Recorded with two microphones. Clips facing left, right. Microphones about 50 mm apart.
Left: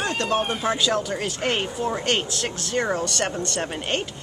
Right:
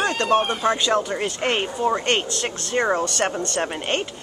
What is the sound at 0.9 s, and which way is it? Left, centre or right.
Speech, centre.